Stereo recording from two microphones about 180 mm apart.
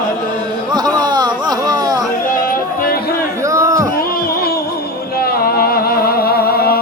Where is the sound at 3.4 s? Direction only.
15° right (ahead or behind).